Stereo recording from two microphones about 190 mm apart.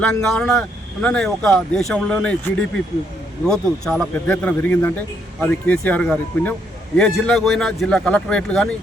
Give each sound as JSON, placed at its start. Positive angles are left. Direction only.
{"t": 0.0, "sound": "speech", "side_deg": 5}